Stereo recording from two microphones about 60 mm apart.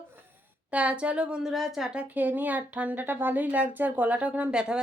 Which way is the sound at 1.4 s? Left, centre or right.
Centre.